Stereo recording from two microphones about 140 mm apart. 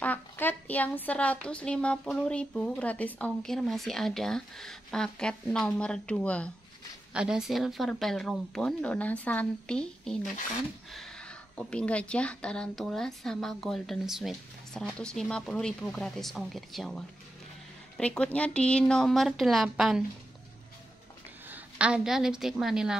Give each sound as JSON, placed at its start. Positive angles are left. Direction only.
{"t": 0.0, "sound": "a woman's voice", "side_deg": 15}
{"t": 7.2, "sound": "speech", "side_deg": -5}
{"t": 21.5, "sound": "a woman's voice", "side_deg": -10}